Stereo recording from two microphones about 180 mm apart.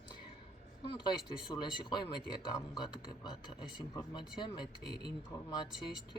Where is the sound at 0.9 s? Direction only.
25° left (ahead or behind).